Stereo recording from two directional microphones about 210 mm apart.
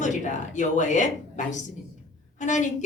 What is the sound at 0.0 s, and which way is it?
A woman's voice, 35° left (ahead or behind).